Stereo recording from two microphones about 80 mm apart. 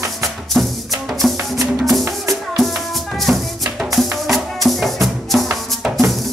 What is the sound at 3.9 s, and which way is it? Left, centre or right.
Music, centre.